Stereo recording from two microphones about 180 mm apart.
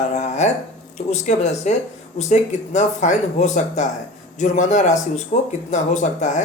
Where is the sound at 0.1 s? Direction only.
40° left (ahead or behind).